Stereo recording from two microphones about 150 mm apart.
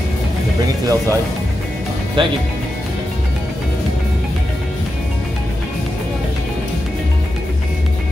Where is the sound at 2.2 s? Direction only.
35° right (ahead or behind).